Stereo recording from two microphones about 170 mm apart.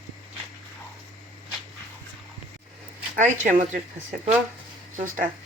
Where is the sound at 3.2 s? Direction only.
50° right (ahead or behind).